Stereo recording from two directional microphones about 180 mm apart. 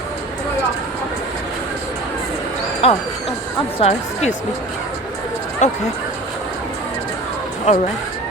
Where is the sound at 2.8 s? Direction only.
35° left (ahead or behind).